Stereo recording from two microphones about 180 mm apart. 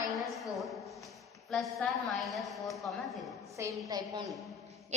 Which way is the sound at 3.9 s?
20° right (ahead or behind).